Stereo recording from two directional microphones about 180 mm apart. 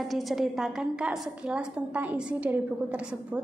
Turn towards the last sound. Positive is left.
turn(degrees=-5)  # may be behind; listen again after turning